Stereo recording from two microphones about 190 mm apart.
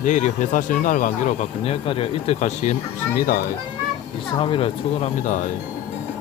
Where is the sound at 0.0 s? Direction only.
40° left (ahead or behind).